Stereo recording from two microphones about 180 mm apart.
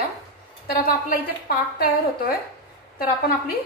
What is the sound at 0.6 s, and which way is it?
A woman's voice, 55° left (ahead or behind).